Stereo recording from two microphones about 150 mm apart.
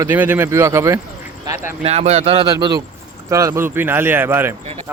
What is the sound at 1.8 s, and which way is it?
Speech, 45° right (ahead or behind).